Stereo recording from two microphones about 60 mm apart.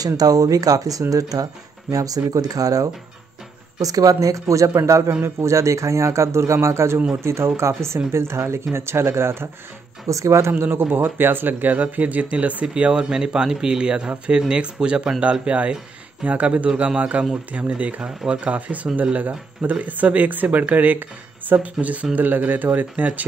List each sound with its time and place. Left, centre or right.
0.0 s speech: right
10.0 s speech: right
10.5 s speech: right